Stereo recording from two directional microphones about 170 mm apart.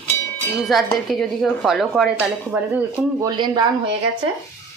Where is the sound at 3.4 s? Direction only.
25° right (ahead or behind).